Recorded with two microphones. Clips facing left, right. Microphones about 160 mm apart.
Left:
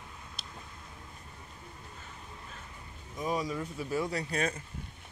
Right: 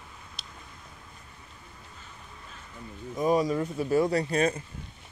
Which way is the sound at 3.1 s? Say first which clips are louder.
Right 8 dB; 50° right (ahead or behind).